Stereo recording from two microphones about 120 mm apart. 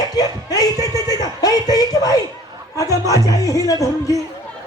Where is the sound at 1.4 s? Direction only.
30° left (ahead or behind).